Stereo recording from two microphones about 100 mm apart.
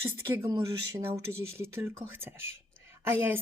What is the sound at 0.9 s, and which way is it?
Speech, 25° right (ahead or behind).